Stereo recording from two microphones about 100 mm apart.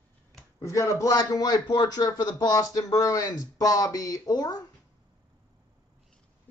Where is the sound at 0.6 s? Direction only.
35° left (ahead or behind).